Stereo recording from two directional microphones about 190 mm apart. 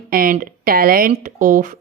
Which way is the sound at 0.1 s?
50° right (ahead or behind).